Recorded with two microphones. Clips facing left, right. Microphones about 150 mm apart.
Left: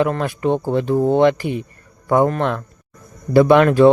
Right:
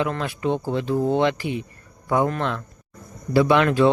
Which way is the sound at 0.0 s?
50° left (ahead or behind).